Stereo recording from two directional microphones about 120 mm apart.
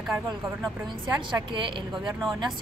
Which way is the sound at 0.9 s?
40° right (ahead or behind).